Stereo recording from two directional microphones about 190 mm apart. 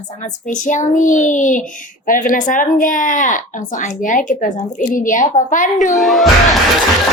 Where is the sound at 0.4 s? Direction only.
40° left (ahead or behind).